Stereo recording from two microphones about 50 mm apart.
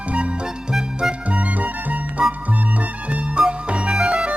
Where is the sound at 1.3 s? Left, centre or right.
Right.